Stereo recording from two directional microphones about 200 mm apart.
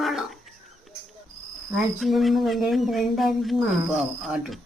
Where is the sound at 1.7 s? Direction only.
Centre (ahead or behind).